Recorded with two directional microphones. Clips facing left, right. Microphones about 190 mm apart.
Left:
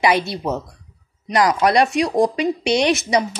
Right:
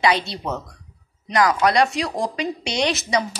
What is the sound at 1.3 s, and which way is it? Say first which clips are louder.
Speech: left 2 dB; 20° left (ahead or behind).